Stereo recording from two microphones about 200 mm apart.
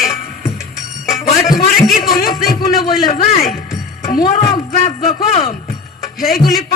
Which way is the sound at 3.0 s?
30° left (ahead or behind).